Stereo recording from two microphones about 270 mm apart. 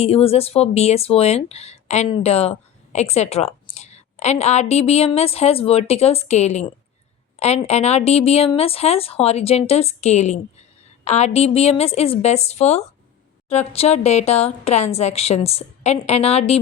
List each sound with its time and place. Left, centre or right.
0.0 s speech: left